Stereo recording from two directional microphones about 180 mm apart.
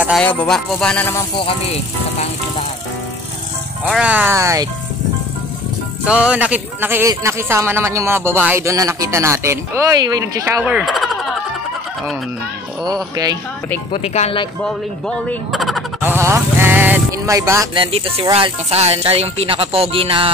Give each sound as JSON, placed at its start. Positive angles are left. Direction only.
{"t": 0.2, "sound": "speech", "side_deg": 10}
{"t": 1.4, "sound": "speech", "side_deg": 30}
{"t": 3.8, "sound": "a man's voice", "side_deg": -5}
{"t": 6.0, "sound": "a man's voice", "side_deg": -5}
{"t": 10.6, "sound": "a man's voice", "side_deg": -5}
{"t": 13.1, "sound": "speech", "side_deg": -20}
{"t": 13.9, "sound": "speech", "side_deg": 35}
{"t": 14.6, "sound": "speech", "side_deg": 5}
{"t": 16.0, "sound": "a sound", "side_deg": -15}
{"t": 17.4, "sound": "speech", "side_deg": -20}
{"t": 17.9, "sound": "speech", "side_deg": -35}